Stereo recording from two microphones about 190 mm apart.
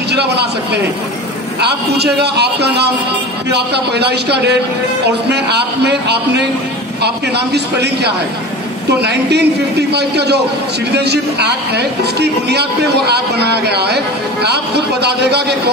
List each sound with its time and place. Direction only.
0.1 s a man's voice: 60° right (ahead or behind)